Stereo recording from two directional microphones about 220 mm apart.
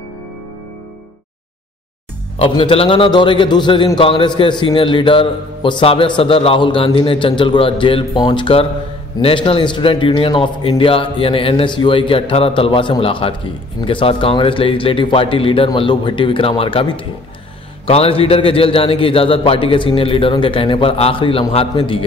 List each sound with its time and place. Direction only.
2.3 s a man's voice: 25° left (ahead or behind)